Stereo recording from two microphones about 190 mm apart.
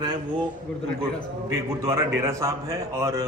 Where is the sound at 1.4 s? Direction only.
15° right (ahead or behind).